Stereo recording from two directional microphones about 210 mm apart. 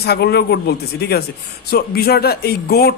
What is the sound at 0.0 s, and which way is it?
Speech, 50° left (ahead or behind).